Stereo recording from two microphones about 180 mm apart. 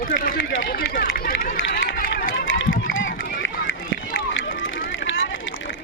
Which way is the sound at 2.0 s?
55° left (ahead or behind).